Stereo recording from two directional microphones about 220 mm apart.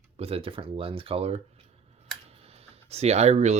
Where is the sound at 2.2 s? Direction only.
25° right (ahead or behind).